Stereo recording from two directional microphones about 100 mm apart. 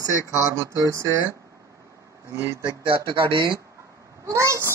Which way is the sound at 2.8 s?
60° right (ahead or behind).